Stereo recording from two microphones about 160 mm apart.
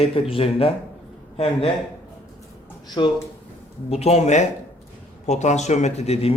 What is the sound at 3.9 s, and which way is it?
Speech, 40° left (ahead or behind).